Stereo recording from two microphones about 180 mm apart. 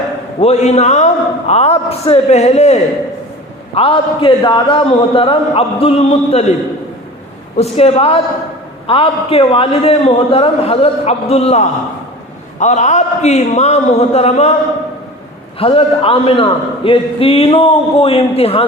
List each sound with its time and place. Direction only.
0.3 s a man's voice: 35° left (ahead or behind)
7.5 s a man's voice: 35° left (ahead or behind)
15.5 s a man's voice: 30° left (ahead or behind)